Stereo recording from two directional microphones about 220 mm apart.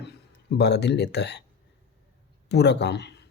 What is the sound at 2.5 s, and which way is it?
Speech, 50° left (ahead or behind).